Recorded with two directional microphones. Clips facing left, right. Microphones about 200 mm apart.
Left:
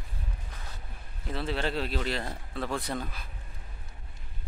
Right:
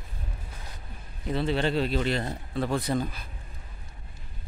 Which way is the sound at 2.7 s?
Centre (ahead or behind).